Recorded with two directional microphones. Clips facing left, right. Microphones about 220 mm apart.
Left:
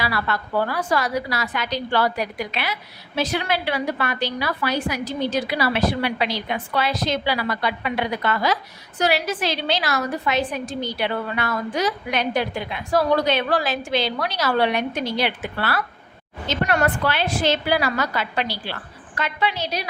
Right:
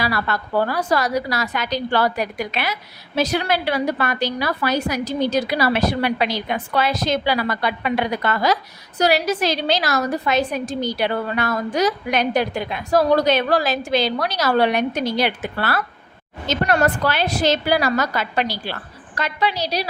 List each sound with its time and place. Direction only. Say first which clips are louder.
0.0 s a woman's voice: right 2 dB; 40° right (ahead or behind)